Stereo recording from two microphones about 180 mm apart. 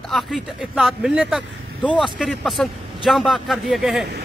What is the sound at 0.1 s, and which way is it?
A man's voice, centre (ahead or behind).